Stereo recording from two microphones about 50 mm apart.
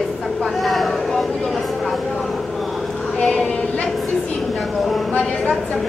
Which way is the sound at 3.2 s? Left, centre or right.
Left.